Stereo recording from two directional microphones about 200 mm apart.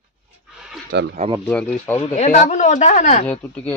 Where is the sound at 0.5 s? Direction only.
5° right (ahead or behind).